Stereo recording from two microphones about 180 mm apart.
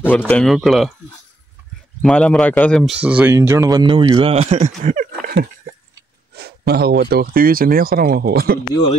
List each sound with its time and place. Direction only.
0.3 s speech: centre (ahead or behind)
2.0 s speech: 5° left (ahead or behind); by 5.0 s 40° right (ahead or behind)
5.2 s a sound: 55° right (ahead or behind)
6.3 s speech: 60° right (ahead or behind)